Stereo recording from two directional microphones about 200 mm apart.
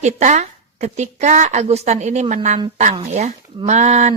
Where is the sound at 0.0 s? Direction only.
35° right (ahead or behind).